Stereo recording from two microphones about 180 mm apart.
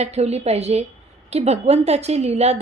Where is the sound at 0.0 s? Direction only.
35° right (ahead or behind).